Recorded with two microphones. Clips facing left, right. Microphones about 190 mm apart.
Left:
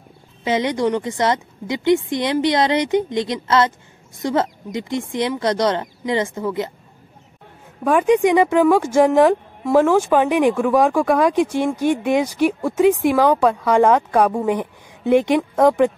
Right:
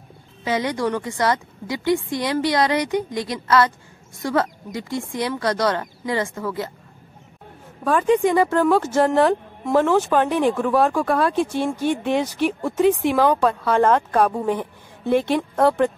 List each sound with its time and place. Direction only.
0.4 s speech: 20° left (ahead or behind)
7.8 s speech: 15° left (ahead or behind)